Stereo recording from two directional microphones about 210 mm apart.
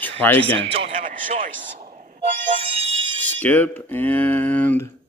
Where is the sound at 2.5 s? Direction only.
25° right (ahead or behind).